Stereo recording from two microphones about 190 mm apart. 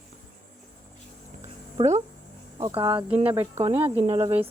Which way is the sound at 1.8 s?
35° right (ahead or behind).